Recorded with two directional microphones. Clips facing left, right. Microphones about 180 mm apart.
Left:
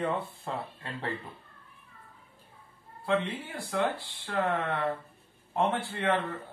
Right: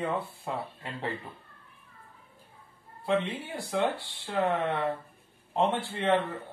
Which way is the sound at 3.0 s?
20° right (ahead or behind).